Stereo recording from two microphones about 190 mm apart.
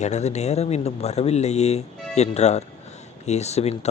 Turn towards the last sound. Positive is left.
turn(degrees=35)  # may be behind; listen again after turning